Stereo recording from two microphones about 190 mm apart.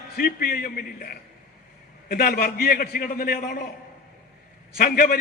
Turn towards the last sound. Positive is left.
turn(degrees=50)  # may be behind; listen again after turning